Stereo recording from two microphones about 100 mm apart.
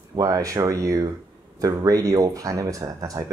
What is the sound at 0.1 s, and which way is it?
Speech, 40° right (ahead or behind).